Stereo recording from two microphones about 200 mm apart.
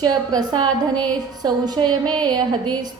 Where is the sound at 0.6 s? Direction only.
5° left (ahead or behind).